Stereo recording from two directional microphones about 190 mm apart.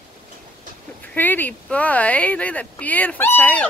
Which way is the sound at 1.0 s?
10° left (ahead or behind).